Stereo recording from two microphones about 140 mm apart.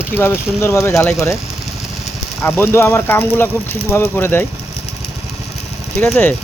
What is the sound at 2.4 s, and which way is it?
Speech, 15° left (ahead or behind).